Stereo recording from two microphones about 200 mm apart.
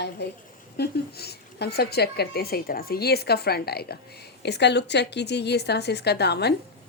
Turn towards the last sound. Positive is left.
turn(degrees=55)  # may be behind; listen again after turning